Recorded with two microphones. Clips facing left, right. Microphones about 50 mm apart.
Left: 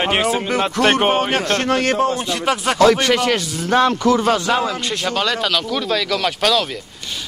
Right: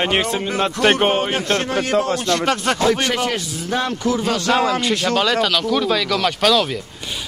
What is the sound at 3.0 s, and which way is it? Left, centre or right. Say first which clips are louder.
A man's voice: left 4 dB; left.